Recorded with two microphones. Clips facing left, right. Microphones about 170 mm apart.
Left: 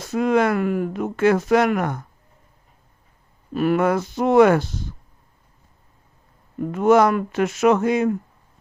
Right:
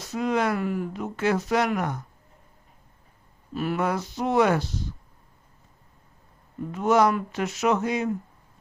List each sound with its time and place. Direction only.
0.0 s speech: 55° left (ahead or behind)
3.5 s speech: 60° left (ahead or behind)
6.6 s speech: 55° left (ahead or behind)